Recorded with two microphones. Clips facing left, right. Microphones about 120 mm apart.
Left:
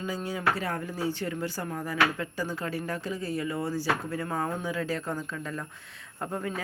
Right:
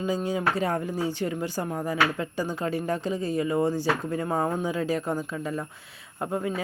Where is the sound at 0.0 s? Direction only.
20° right (ahead or behind).